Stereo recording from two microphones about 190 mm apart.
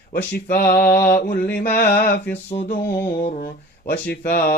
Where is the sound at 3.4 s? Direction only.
50° left (ahead or behind).